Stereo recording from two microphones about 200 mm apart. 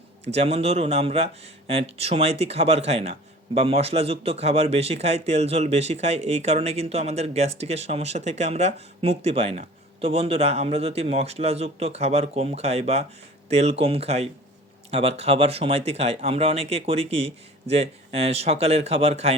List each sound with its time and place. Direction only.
0.3 s speech: 30° right (ahead or behind)